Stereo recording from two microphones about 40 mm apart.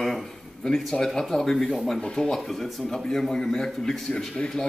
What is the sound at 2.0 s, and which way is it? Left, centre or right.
Speech, left.